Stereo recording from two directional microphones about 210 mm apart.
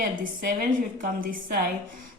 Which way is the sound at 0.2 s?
40° right (ahead or behind).